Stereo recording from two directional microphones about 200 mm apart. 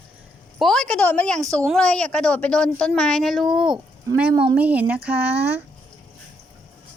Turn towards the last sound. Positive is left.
turn(degrees=-10)  # may be behind; listen again after turning